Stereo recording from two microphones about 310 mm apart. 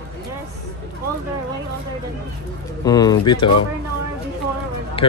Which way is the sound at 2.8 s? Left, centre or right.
Centre.